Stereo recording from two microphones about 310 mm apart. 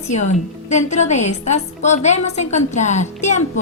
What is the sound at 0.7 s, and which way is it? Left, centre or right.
A woman's voice, left.